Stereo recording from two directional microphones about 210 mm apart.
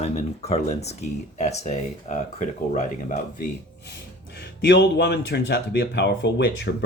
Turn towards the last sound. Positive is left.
turn(degrees=55)  # may be behind; listen again after turning